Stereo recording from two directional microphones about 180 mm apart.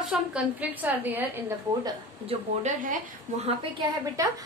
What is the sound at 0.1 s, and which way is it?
A woman's voice, 5° right (ahead or behind).